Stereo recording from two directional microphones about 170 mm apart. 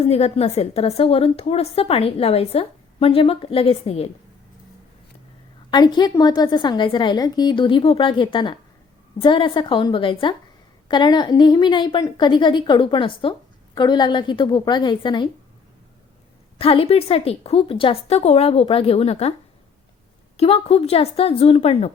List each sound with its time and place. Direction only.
0.1 s a woman's voice: 40° left (ahead or behind)
5.7 s a woman's voice: 25° left (ahead or behind)
16.6 s a woman's voice: 35° left (ahead or behind)
20.3 s a woman's voice: 35° left (ahead or behind)